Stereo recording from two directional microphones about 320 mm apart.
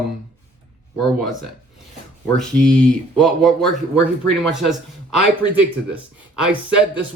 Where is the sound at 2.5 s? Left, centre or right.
Centre.